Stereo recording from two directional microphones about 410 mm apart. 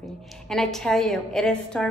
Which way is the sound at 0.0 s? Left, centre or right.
Centre.